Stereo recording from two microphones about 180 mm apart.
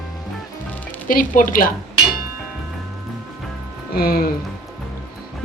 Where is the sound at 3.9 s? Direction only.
55° left (ahead or behind).